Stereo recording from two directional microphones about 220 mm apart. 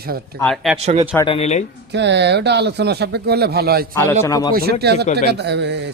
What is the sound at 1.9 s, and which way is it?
Speech, 50° right (ahead or behind).